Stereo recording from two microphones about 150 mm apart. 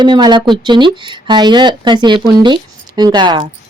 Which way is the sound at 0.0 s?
30° right (ahead or behind).